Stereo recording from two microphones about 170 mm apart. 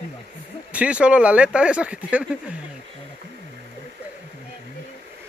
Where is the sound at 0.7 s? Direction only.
5° right (ahead or behind).